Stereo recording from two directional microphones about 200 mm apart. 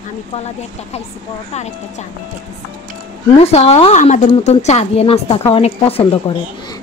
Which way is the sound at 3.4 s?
30° left (ahead or behind).